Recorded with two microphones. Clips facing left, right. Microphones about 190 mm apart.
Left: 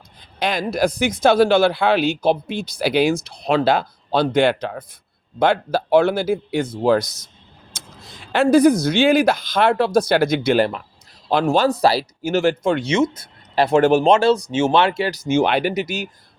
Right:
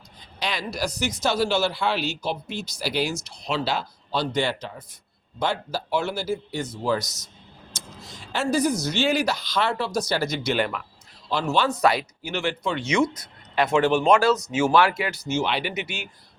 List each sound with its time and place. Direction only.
0.3 s speech: 50° left (ahead or behind)
10.6 s speech: 35° left (ahead or behind)
11.3 s speech: 55° left (ahead or behind)
12.8 s speech: 25° left (ahead or behind)
15.2 s speech: 55° left (ahead or behind)
15.7 s speech: 40° left (ahead or behind)